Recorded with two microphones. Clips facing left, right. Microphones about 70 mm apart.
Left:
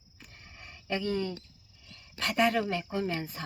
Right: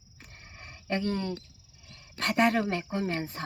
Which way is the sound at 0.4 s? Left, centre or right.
Right.